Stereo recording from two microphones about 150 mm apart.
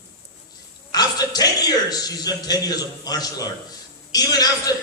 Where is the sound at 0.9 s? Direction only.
25° left (ahead or behind).